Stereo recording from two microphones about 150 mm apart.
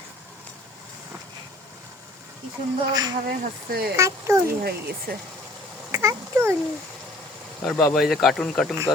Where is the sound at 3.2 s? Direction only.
85° right.